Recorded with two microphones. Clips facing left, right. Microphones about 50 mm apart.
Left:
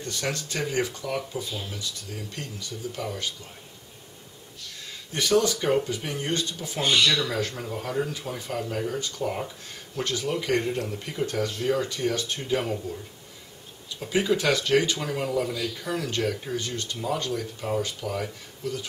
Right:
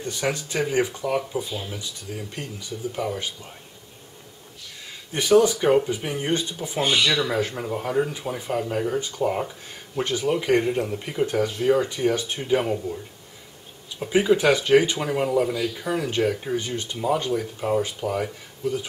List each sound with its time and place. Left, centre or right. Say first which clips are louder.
0.0 s speech: right 4 dB; centre
5.1 s speech: right 5 dB; centre